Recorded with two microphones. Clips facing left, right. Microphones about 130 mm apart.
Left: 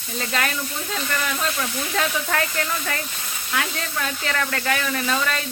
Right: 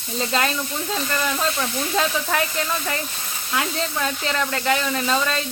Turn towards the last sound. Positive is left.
turn(degrees=-25)  # may be behind; listen again after turning